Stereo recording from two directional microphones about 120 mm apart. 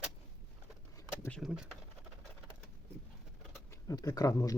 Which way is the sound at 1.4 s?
5° right (ahead or behind).